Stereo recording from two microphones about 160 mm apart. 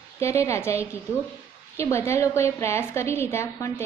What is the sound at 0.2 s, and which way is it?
A woman's voice, 15° left (ahead or behind).